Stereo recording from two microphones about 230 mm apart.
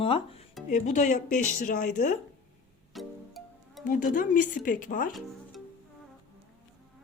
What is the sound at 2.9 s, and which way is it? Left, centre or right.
Music, centre.